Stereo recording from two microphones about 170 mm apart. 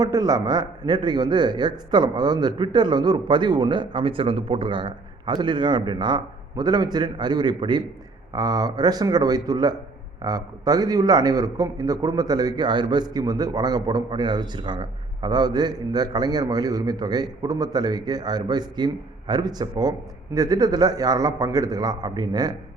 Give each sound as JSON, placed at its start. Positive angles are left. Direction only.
{"t": 0.0, "sound": "a man's voice", "side_deg": -20}